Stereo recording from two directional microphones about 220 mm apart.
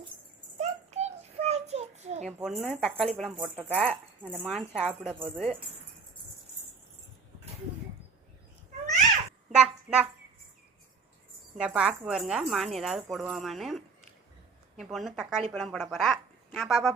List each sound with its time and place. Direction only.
0.6 s child singing: 30° right (ahead or behind)
2.2 s speech: centre (ahead or behind)
4.4 s speech: 5° left (ahead or behind)
4.8 s speech: 5° right (ahead or behind)
9.6 s a sound: 5° right (ahead or behind)
11.5 s speech: 5° right (ahead or behind)